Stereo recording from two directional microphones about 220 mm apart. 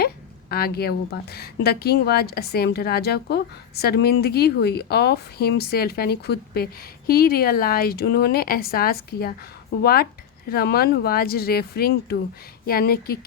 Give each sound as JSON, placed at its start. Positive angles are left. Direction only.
{"t": 0.5, "sound": "speech", "side_deg": 45}